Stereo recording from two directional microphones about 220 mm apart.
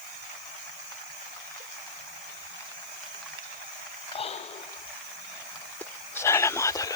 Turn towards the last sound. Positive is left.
turn(degrees=15)  # may be behind; listen again after turning